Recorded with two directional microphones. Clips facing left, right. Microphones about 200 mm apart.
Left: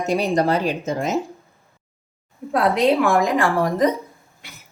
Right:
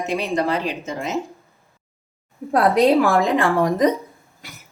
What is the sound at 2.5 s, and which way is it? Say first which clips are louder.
A woman's voice: right 2 dB; 40° right (ahead or behind).